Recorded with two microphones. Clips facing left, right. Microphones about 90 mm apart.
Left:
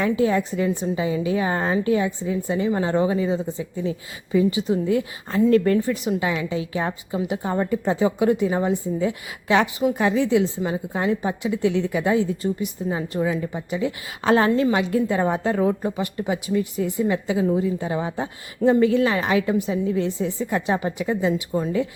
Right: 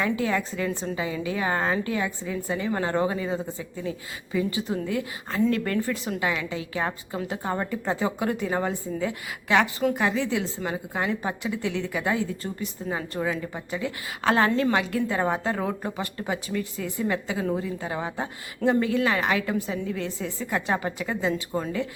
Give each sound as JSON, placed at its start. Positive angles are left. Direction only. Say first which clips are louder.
{"t": 0.0, "sound": "a woman's voice", "louder": "left 5 dB", "side_deg": 25}
{"t": 5.8, "sound": "a woman's voice", "louder": "left 4 dB", "side_deg": 20}
{"t": 13.2, "sound": "a woman's voice", "louder": "left 4 dB", "side_deg": 30}